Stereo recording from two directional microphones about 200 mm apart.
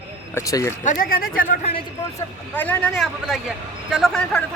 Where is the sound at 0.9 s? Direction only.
45° left (ahead or behind).